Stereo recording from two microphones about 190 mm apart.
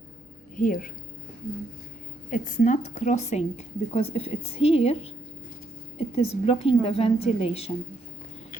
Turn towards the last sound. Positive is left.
turn(degrees=30)  # may be behind; listen again after turning